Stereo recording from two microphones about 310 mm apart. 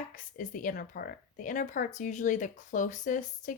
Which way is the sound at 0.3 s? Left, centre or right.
Left.